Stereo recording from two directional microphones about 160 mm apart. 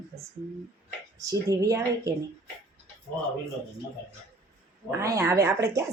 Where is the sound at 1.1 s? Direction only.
20° right (ahead or behind).